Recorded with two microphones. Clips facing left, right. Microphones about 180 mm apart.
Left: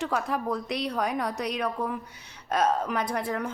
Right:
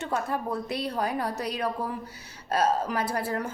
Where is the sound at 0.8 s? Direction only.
30° right (ahead or behind).